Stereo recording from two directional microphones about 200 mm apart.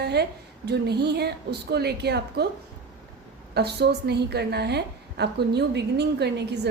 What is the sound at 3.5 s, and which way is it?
A woman's voice, 55° right (ahead or behind).